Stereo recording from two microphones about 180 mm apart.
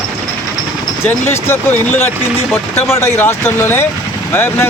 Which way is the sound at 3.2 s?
10° left (ahead or behind).